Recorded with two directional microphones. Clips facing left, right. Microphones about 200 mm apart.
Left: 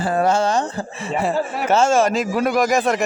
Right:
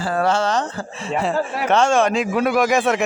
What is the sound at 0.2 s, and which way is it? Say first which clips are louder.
Speech: left 1 dB; 10° left (ahead or behind).